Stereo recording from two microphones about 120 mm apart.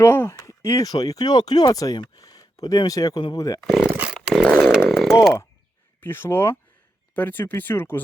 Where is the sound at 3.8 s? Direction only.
10° right (ahead or behind).